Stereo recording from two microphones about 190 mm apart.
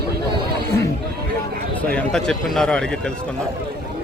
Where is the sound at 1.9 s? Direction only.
5° left (ahead or behind).